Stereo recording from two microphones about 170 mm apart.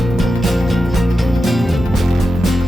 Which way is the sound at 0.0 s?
Centre (ahead or behind).